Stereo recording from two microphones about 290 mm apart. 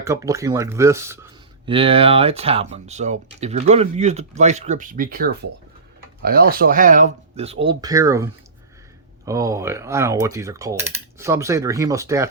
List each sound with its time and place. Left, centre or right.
0.0 s speech: centre
9.2 s mechanisms: centre